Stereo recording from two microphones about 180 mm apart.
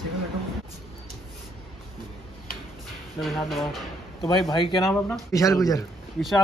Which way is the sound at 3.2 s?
Centre (ahead or behind).